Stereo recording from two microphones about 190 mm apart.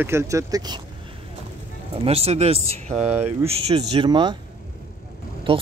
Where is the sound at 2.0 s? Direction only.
30° right (ahead or behind).